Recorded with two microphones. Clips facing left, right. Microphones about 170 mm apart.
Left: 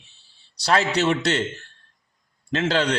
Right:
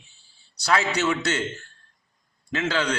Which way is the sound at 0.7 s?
30° left (ahead or behind).